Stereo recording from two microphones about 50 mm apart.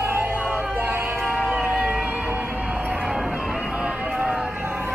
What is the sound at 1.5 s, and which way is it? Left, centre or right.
Music, right.